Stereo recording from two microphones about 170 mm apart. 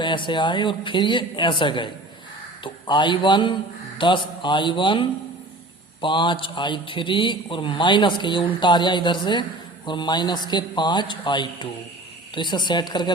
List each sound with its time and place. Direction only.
0.0 s a man's voice: 30° left (ahead or behind)